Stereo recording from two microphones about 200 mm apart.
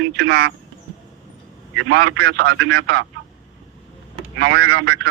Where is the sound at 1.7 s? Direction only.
90° right.